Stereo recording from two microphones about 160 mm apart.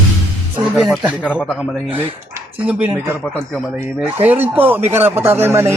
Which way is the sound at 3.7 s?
10° right (ahead or behind).